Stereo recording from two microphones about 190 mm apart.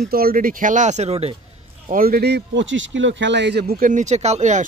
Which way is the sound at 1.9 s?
50° right (ahead or behind).